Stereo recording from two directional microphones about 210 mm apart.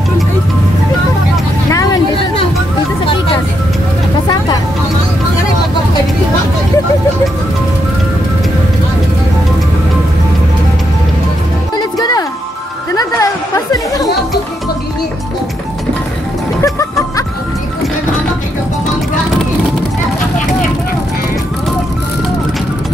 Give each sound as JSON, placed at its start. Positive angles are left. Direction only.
{"t": 1.7, "sound": "vehicle", "side_deg": 15}
{"t": 11.7, "sound": "music", "side_deg": 20}
{"t": 12.9, "sound": "chatter", "side_deg": 20}
{"t": 16.6, "sound": "music", "side_deg": 15}